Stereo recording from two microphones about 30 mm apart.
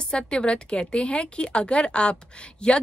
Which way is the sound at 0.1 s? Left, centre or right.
Left.